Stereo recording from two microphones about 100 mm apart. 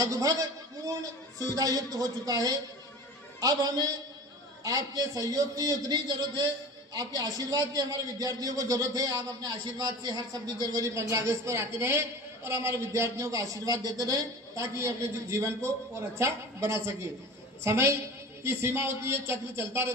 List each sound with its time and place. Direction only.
0.0 s a man's voice: 35° right (ahead or behind)